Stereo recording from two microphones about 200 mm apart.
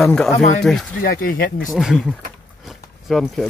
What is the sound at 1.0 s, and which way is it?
Speech, 45° left (ahead or behind).